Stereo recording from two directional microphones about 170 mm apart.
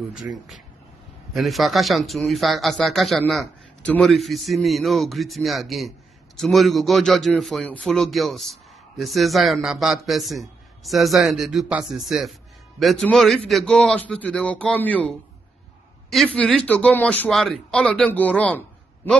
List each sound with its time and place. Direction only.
1.3 s a man's voice: centre (ahead or behind)